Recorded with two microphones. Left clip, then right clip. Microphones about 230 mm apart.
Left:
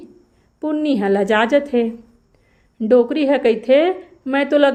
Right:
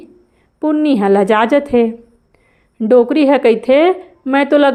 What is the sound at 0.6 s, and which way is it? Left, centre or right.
A woman's voice, right.